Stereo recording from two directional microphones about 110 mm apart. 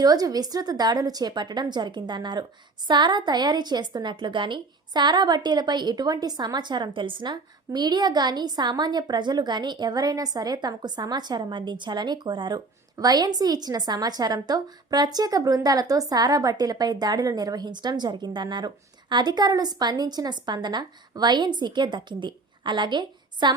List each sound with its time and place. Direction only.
0.0 s a woman's voice: 35° right (ahead or behind)